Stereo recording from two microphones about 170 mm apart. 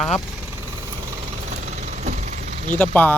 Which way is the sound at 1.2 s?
45° right (ahead or behind).